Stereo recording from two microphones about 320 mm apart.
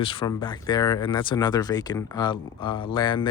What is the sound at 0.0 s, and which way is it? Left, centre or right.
Speech, centre.